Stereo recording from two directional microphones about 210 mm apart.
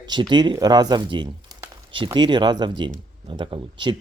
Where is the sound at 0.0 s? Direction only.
20° right (ahead or behind).